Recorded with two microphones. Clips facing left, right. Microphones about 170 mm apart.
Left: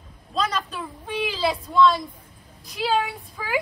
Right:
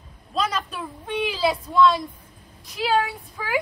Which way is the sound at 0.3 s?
5° right (ahead or behind).